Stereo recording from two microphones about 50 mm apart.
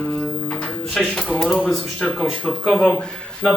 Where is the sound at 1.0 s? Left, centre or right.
Centre.